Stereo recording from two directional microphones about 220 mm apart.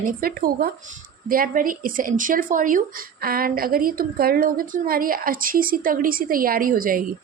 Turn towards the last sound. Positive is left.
turn(degrees=-40)  # may be behind; listen again after turning